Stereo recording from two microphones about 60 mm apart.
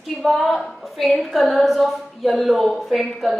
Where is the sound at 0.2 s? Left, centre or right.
Centre.